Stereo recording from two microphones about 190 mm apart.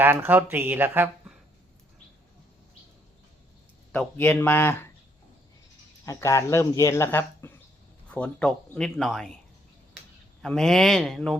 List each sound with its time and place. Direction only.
0.0 s speech: 10° right (ahead or behind)
3.9 s speech: 10° left (ahead or behind)
6.1 s speech: 15° left (ahead or behind)
10.4 s speech: centre (ahead or behind)